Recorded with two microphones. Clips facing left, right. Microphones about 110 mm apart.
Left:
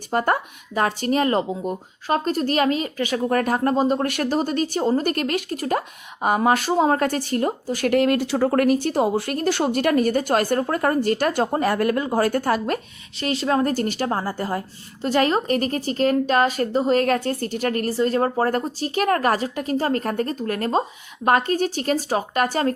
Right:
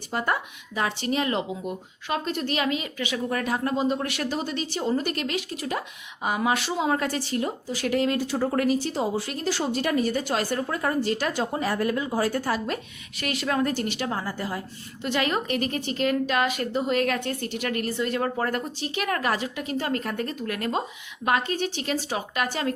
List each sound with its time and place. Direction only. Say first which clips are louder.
0.1 s speech: left 6 dB; 50° left (ahead or behind)
13.1 s a woman's voice: left 5 dB; 30° left (ahead or behind)